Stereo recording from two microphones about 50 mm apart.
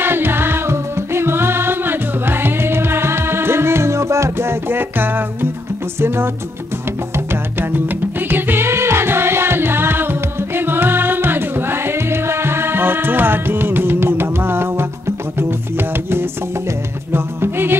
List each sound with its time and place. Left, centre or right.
0.0 s music: right
5.9 s music: right
8.3 s music: right
17.1 s music: right